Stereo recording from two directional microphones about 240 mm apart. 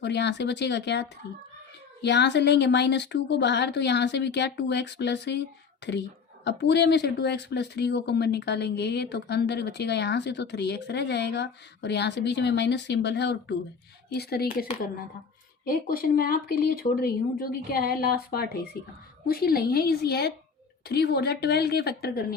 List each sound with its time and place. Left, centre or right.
0.0 s speech: left